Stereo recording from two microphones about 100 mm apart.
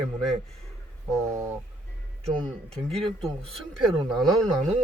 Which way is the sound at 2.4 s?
5° left (ahead or behind).